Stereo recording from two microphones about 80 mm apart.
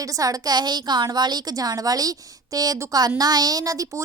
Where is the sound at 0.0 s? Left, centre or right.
Right.